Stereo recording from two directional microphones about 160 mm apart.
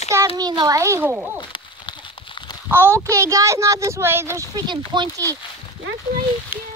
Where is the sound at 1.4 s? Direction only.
30° left (ahead or behind).